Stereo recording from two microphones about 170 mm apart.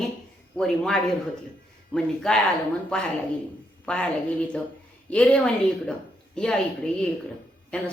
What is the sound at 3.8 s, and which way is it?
A woman's voice, 5° left (ahead or behind).